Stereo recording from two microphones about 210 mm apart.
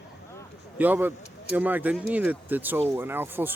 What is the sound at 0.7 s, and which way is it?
Speech, 10° right (ahead or behind).